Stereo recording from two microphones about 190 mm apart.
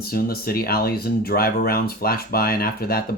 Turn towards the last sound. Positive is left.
turn(degrees=55)  # may be behind; listen again after turning